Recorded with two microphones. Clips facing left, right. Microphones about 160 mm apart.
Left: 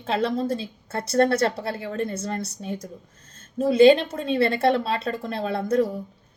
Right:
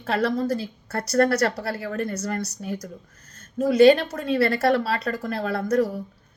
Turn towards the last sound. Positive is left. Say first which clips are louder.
# even
turn(degrees=25)  # may be behind; listen again after turning